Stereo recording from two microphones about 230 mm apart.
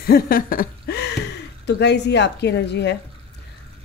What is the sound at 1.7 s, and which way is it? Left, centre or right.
Speech, left.